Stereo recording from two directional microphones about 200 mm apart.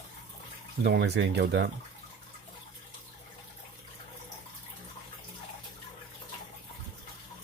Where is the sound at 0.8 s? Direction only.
60° right (ahead or behind).